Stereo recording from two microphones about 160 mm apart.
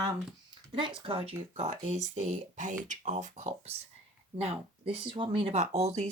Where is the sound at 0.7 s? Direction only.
30° right (ahead or behind).